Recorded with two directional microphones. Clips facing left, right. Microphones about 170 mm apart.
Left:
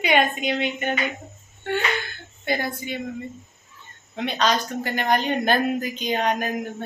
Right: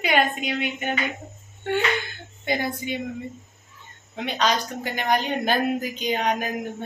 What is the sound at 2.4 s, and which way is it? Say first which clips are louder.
Speech: even; 20° right (ahead or behind).